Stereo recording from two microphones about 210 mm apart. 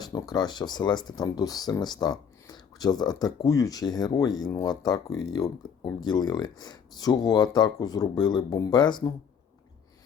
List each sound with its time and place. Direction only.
0.0 s speech: 15° left (ahead or behind)